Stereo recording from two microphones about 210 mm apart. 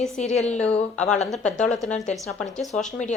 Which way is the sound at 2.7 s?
35° left (ahead or behind).